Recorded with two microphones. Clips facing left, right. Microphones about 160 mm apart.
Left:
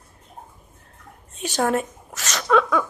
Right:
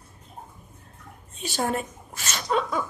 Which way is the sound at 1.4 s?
45° left (ahead or behind).